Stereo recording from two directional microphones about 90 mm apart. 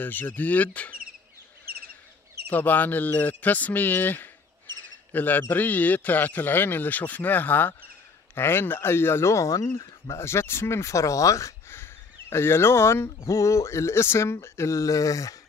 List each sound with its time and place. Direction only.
0.0 s speech: 20° left (ahead or behind)
2.5 s speech: 20° left (ahead or behind); by 15.3 s 40° left (ahead or behind)